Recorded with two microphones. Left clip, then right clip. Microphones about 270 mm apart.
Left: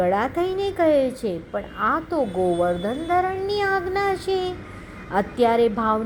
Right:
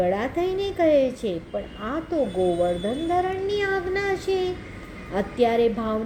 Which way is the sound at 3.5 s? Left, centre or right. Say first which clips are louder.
Left 2 dB; centre.